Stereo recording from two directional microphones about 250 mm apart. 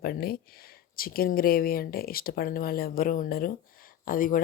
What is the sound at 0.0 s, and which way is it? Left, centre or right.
A woman's voice, left.